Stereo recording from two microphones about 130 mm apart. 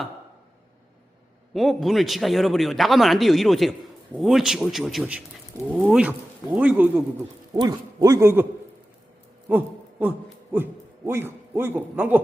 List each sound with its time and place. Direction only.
1.5 s a man's voice: centre (ahead or behind)
7.5 s a man's voice: 30° right (ahead or behind)
9.5 s a man's voice: 15° right (ahead or behind)